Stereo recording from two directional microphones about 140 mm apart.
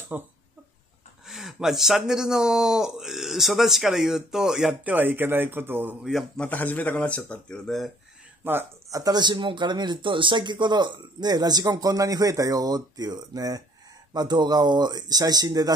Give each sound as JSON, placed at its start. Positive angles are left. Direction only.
{"t": 0.1, "sound": "speech", "side_deg": -10}
{"t": 6.0, "sound": "speech", "side_deg": 0}
{"t": 8.5, "sound": "speech", "side_deg": -15}
{"t": 9.0, "sound": "speech", "side_deg": -30}